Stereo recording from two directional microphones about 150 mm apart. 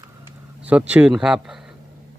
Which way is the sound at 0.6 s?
10° right (ahead or behind).